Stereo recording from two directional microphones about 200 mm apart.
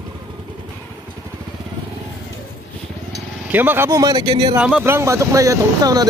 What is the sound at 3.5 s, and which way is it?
Speech, 10° right (ahead or behind).